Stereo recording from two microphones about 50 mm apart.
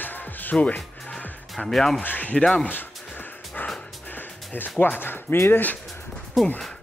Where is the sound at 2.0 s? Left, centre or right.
Left.